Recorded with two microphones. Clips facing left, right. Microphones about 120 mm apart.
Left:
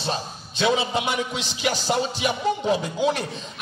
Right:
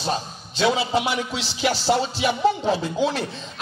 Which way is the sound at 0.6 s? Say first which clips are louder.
Right 1 dB; 20° left (ahead or behind).